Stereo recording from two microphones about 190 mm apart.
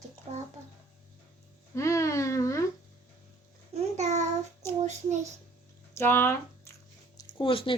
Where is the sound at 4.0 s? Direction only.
35° right (ahead or behind).